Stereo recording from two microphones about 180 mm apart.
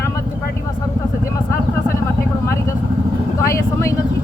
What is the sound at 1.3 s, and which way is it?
Vehicle, 15° left (ahead or behind).